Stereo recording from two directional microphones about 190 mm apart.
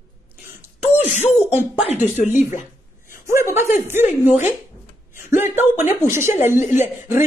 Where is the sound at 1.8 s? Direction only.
40° left (ahead or behind).